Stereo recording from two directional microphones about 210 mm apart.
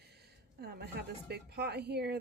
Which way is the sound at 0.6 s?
50° right (ahead or behind).